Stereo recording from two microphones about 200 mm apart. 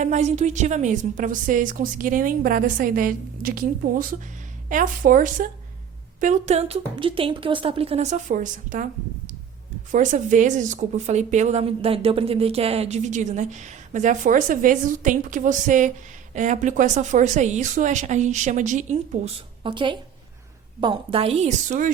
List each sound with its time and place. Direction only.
0.0 s speech: 35° right (ahead or behind)
9.9 s speech: 40° right (ahead or behind)
19.6 s speech: 25° right (ahead or behind)